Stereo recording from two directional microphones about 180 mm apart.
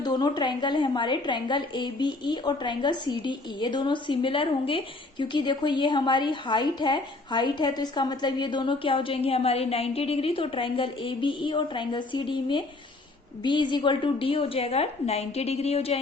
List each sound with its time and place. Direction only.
0.0 s a woman's voice: 25° left (ahead or behind)